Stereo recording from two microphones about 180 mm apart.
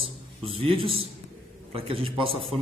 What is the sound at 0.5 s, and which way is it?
A man's voice, 30° right (ahead or behind).